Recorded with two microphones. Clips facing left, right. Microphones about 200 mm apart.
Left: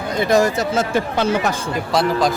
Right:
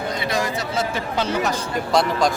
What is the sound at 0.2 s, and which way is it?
Speech, 45° left (ahead or behind).